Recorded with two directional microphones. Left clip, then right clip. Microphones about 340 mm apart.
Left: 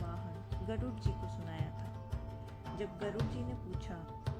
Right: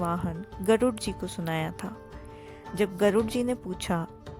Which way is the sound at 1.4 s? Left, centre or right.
Right.